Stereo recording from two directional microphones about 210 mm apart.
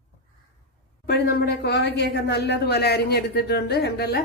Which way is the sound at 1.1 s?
45° left (ahead or behind).